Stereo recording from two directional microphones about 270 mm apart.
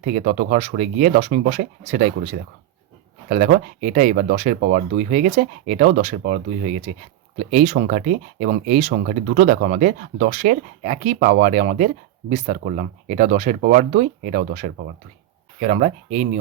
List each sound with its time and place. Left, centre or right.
0.0 s speech: right